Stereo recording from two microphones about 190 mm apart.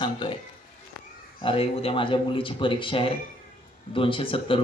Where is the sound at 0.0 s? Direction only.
25° left (ahead or behind).